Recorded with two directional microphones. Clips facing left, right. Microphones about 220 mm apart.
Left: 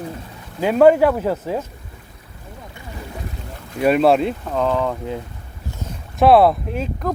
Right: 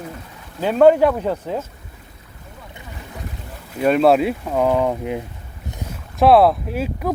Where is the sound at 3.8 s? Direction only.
5° left (ahead or behind); by 5.2 s 15° right (ahead or behind).